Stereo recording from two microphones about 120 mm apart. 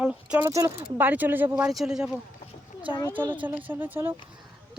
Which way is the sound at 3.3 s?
15° right (ahead or behind).